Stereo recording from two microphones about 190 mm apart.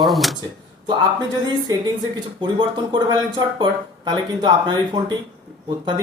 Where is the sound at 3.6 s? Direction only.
25° right (ahead or behind).